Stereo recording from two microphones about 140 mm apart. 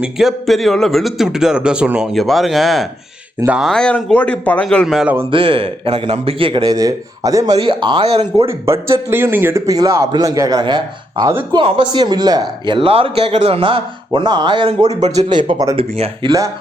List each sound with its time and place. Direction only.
0.0 s a man's voice: centre (ahead or behind)
3.7 s a man's voice: 5° left (ahead or behind)
4.9 s speech: 10° right (ahead or behind)
5.3 s speech: 40° right (ahead or behind)
7.6 s speech: 35° right (ahead or behind)
8.4 s a man's voice: 20° right (ahead or behind)
14.8 s speech: 55° right (ahead or behind)
15.3 s speech: 35° right (ahead or behind)